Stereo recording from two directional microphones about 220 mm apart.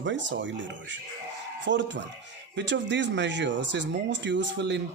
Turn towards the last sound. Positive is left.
turn(degrees=-50)  # may be behind; listen again after turning